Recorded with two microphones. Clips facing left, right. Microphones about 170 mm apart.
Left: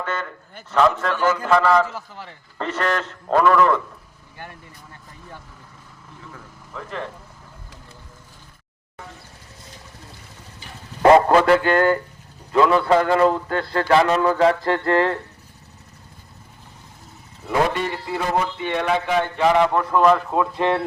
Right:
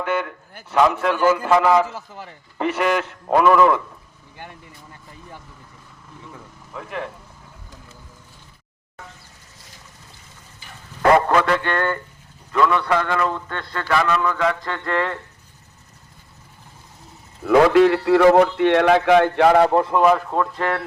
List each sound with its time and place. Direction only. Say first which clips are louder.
0.0 s a man's voice: right 5 dB; 10° right (ahead or behind)
6.3 s a sound: right 1 dB; 10° right (ahead or behind)
11.0 s a man's voice: left 3 dB; 25° left (ahead or behind)
17.4 s a man's voice: right 9 dB; 90° right
19.6 s a man's voice: right 3 dB; 30° right (ahead or behind)
19.9 s a man's voice: even; 5° right (ahead or behind)
20.6 s speech: left 3 dB; 20° left (ahead or behind)